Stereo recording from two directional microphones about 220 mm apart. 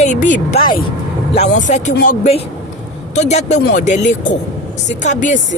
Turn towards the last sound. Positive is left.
turn(degrees=35)  # may be behind; listen again after turning